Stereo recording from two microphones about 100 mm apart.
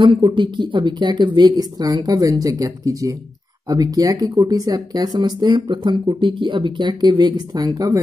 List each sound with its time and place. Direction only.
0.3 s speech: 55° right (ahead or behind); by 8.0 s 35° right (ahead or behind)